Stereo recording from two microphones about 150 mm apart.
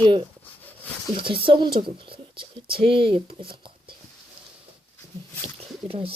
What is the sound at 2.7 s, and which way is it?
Speech, 35° right (ahead or behind).